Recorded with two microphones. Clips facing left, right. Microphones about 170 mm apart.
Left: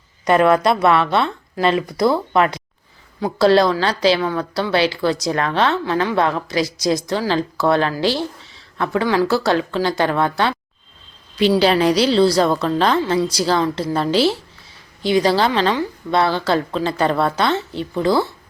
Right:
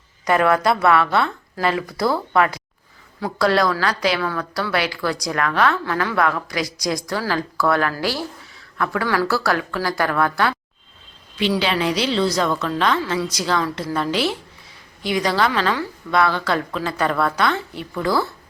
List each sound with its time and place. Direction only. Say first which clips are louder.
0.3 s a woman's voice: left 3 dB; 20° left (ahead or behind)
11.3 s a woman's voice: left 6 dB; 40° left (ahead or behind)